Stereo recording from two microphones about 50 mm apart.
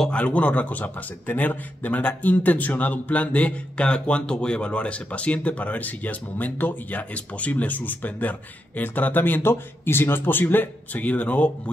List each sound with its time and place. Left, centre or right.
0.1 s speech: left